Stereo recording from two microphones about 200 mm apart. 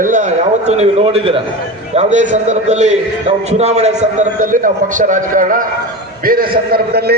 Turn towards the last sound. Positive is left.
turn(degrees=-50)  # may be behind; listen again after turning